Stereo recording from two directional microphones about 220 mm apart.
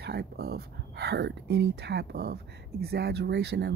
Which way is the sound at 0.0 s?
45° right (ahead or behind).